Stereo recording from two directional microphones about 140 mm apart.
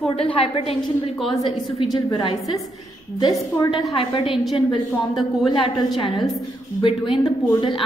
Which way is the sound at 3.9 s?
40° left (ahead or behind).